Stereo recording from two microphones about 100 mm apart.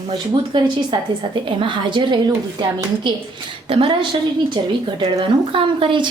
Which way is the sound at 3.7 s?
60° right (ahead or behind).